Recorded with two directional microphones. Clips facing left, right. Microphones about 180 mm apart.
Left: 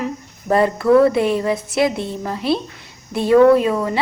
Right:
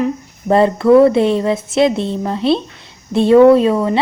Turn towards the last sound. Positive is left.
turn(degrees=-25)  # may be behind; listen again after turning